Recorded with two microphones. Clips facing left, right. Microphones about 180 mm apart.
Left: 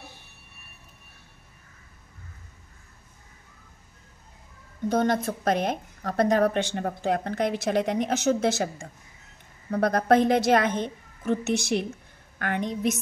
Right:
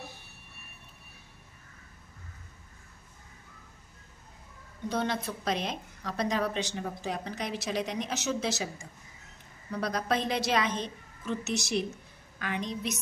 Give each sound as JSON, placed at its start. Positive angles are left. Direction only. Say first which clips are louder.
{"t": 4.8, "sound": "a woman's voice", "louder": "left 7 dB", "side_deg": 50}